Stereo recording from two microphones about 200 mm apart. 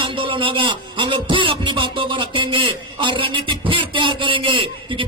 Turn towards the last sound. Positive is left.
turn(degrees=-25)  # may be behind; listen again after turning